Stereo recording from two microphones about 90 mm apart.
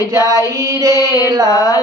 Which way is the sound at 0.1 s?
40° right (ahead or behind).